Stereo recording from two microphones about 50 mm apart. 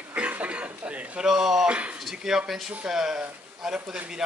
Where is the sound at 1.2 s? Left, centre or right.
Centre.